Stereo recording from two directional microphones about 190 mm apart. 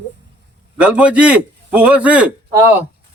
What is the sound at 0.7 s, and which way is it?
A man's voice, 5° right (ahead or behind).